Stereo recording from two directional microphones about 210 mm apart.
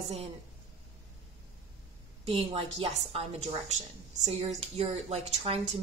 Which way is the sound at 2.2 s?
25° right (ahead or behind).